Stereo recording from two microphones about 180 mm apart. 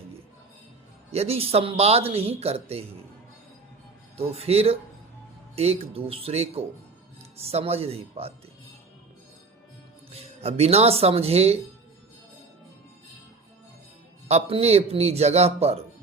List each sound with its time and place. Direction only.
1.1 s a man's voice: 35° right (ahead or behind)
4.2 s a man's voice: 35° right (ahead or behind)
10.1 s a man's voice: 35° right (ahead or behind)
14.3 s a man's voice: 35° right (ahead or behind)